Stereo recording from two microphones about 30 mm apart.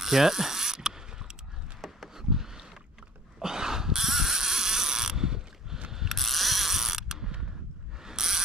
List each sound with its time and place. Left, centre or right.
0.0 s ratchet: centre
1.8 s a sound: centre
2.1 s rowboat: centre
3.3 s a sound: centre
6.0 s ratchet: centre; by 7.4 s right
8.0 s pulleys: centre